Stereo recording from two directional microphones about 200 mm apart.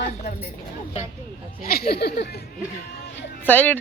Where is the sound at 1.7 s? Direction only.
50° left (ahead or behind).